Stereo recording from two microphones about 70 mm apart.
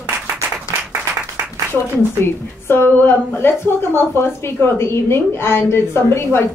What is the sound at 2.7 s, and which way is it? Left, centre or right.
A woman's voice, left.